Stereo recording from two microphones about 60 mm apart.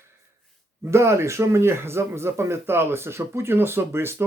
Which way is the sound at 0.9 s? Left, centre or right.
Right.